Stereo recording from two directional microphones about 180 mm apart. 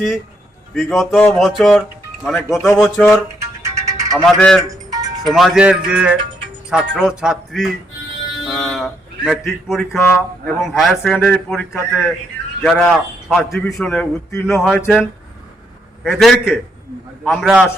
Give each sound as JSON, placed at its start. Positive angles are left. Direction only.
{"t": 0.7, "sound": "a man's voice", "side_deg": 0}
{"t": 3.6, "sound": "music", "side_deg": -15}
{"t": 4.4, "sound": "a man's voice", "side_deg": 5}
{"t": 4.7, "sound": "music", "side_deg": -20}
{"t": 5.3, "sound": "a man's voice", "side_deg": -5}
{"t": 8.4, "sound": "a sound", "side_deg": 0}
{"t": 10.2, "sound": "a man's voice", "side_deg": 5}
{"t": 16.0, "sound": "a man's voice", "side_deg": 0}